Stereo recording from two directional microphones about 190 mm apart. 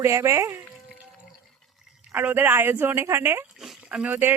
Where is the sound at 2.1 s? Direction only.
10° right (ahead or behind).